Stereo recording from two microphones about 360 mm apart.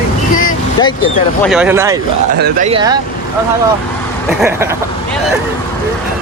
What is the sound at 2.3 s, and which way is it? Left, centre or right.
Speech, right.